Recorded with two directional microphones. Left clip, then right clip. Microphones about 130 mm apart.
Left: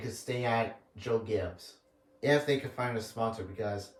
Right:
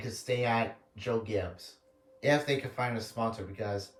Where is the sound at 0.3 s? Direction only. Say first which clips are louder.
Right 2 dB; 25° left (ahead or behind).